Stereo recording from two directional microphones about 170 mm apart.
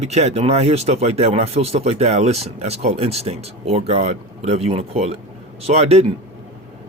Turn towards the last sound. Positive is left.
turn(degrees=-40)  # may be behind; listen again after turning